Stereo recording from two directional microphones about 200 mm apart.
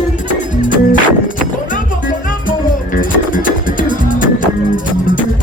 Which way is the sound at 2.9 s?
45° left (ahead or behind).